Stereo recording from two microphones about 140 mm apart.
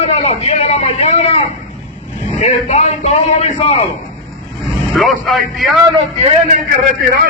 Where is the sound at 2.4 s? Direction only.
55° left (ahead or behind).